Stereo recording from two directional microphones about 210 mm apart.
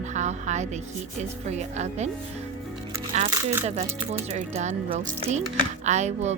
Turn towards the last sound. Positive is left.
turn(degrees=-30)  # may be behind; listen again after turning